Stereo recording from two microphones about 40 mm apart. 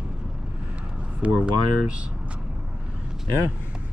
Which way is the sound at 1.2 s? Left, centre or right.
Right.